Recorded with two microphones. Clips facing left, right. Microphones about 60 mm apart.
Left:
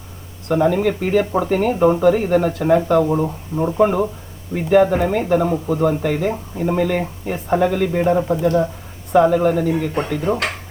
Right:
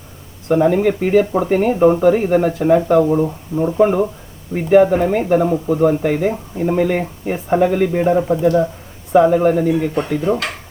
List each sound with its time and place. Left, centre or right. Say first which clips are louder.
0.4 s speech: right 3 dB; centre
3.1 s speech: right 3 dB; centre
3.8 s speech: right 2 dB; centre
9.1 s speech: right 2 dB; centre
10.2 s speech: right 1 dB; left